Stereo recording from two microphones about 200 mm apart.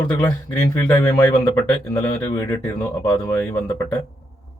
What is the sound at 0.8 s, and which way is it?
Speech, 15° left (ahead or behind).